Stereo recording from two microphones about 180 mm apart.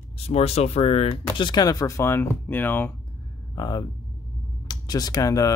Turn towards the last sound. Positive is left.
turn(degrees=20)  # may be behind; listen again after turning